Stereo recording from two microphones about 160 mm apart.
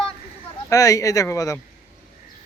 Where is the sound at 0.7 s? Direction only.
20° left (ahead or behind).